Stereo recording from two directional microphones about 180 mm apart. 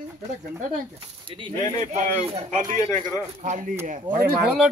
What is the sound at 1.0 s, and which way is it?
Speech, 25° right (ahead or behind).